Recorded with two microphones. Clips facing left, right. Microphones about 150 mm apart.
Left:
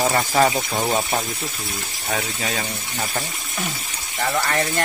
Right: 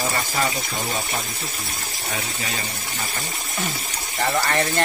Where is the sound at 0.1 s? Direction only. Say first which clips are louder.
Left 7 dB; 55° left (ahead or behind).